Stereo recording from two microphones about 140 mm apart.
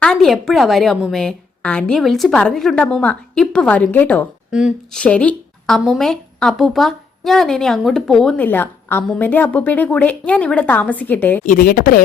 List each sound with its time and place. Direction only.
0.0 s a woman's voice: 5° left (ahead or behind)
4.5 s a woman's voice: centre (ahead or behind)
11.4 s speech: 80° left